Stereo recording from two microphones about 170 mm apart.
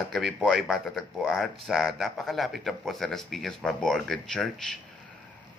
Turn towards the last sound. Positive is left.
turn(degrees=0)  # may be behind; listen again after turning